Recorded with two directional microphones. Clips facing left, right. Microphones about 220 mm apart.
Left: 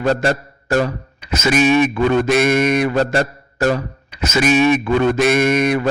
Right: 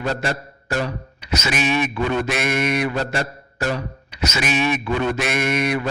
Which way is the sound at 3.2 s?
45° left (ahead or behind).